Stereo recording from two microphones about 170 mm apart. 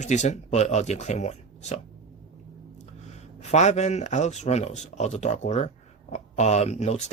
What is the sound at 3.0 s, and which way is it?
Speech, 40° left (ahead or behind).